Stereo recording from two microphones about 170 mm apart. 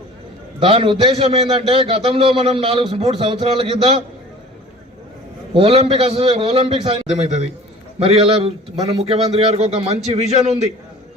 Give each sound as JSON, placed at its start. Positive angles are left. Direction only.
{"t": 0.6, "sound": "a man's voice", "side_deg": -30}
{"t": 5.5, "sound": "a man's voice", "side_deg": -35}